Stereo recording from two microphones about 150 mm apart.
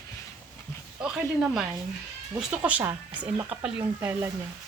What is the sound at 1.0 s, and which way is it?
Speech, 5° right (ahead or behind).